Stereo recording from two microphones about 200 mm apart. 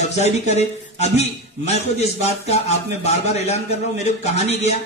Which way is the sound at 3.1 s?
35° left (ahead or behind).